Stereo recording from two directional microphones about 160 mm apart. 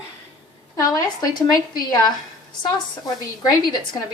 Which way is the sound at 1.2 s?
25° left (ahead or behind).